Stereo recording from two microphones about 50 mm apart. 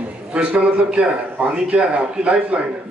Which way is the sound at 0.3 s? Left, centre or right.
Right.